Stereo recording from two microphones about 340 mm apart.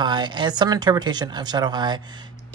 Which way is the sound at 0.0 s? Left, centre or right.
Centre.